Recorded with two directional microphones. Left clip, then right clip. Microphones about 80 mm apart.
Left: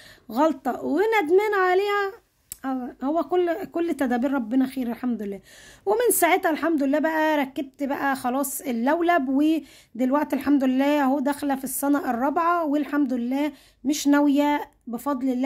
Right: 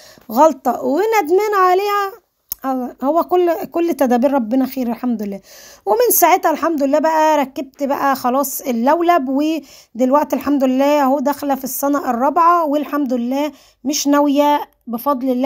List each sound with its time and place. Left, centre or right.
0.3 s speech: right
5.0 s speech: right
14.2 s speech: right